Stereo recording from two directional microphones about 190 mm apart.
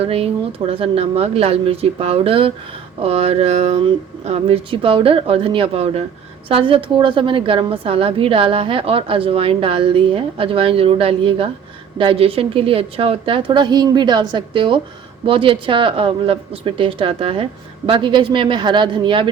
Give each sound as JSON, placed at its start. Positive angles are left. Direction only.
{"t": 0.0, "sound": "a woman's voice", "side_deg": -30}